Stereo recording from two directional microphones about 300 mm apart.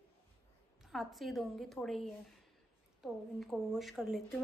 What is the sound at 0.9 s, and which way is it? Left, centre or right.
Speech, centre.